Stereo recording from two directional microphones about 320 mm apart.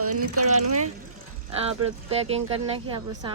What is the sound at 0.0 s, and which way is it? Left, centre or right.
Mechanisms, right.